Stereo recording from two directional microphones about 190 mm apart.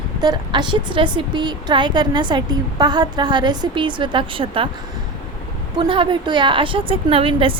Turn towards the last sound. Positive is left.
turn(degrees=-30)  # may be behind; listen again after turning